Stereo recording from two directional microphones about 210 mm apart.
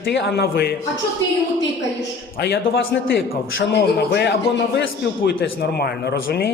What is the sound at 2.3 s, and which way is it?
A man's voice, 50° left (ahead or behind).